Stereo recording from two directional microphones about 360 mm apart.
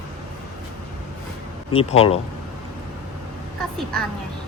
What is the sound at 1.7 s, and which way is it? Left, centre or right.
Speech, centre.